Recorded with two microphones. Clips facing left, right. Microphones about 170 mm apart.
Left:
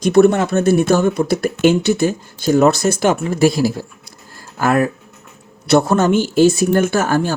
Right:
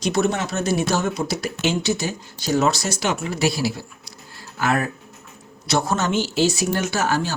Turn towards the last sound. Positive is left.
turn(degrees=50)  # may be behind; listen again after turning